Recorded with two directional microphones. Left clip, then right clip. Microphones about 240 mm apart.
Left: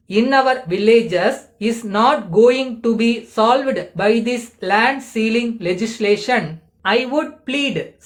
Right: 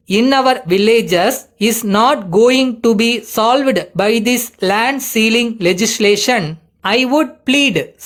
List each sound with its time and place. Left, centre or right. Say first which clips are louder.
0.1 s speech: right 3 dB; right